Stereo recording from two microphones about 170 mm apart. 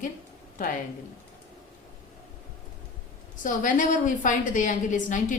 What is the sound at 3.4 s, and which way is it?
A woman's voice, 50° left (ahead or behind).